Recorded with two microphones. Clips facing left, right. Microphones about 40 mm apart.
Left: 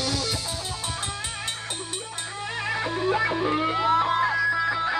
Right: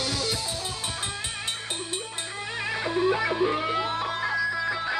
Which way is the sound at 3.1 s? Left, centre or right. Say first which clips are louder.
Left 1 dB; centre.